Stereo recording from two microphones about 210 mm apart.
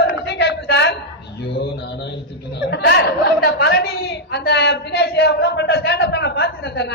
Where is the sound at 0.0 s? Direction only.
50° left (ahead or behind).